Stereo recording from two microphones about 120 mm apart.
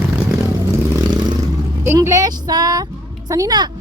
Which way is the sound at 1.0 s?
35° right (ahead or behind).